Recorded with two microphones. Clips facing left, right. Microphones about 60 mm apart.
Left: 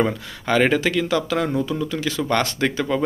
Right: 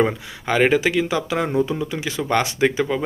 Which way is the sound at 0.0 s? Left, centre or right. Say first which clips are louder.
Right 1 dB; centre.